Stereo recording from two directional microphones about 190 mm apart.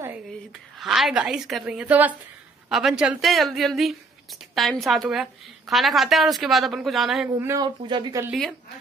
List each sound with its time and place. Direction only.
0.3 s a woman's voice: centre (ahead or behind)
7.3 s speech: 15° right (ahead or behind)
8.3 s speech: centre (ahead or behind)